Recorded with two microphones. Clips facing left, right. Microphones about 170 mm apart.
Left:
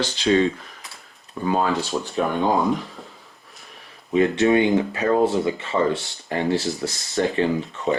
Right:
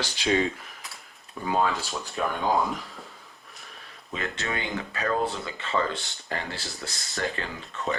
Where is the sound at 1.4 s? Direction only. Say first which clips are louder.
Left 7 dB; 35° left (ahead or behind).